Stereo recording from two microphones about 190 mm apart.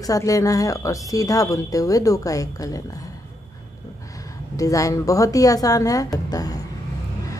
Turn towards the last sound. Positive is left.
turn(degrees=20)  # may be behind; listen again after turning